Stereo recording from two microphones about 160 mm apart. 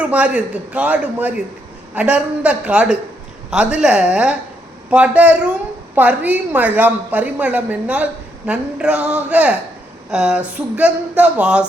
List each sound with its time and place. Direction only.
0.0 s a woman's voice: 10° right (ahead or behind)